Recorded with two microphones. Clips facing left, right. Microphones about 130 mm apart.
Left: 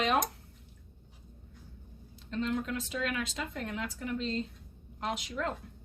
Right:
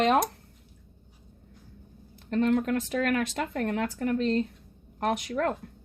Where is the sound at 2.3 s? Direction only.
60° right (ahead or behind).